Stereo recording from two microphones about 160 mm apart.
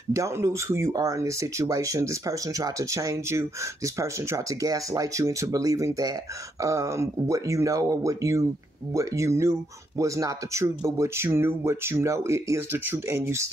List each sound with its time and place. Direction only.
0.1 s speech: 20° right (ahead or behind)